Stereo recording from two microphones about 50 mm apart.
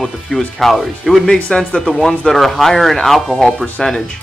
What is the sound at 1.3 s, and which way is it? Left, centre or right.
Speech, centre.